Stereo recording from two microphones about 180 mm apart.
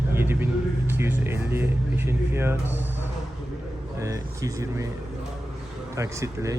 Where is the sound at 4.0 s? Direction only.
15° right (ahead or behind).